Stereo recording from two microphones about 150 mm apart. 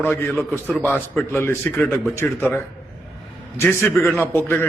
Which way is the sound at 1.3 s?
15° left (ahead or behind).